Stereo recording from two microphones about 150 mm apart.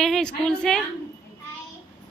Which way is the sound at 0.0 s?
5° left (ahead or behind).